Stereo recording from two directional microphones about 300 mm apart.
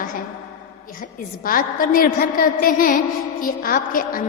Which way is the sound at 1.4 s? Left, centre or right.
Left.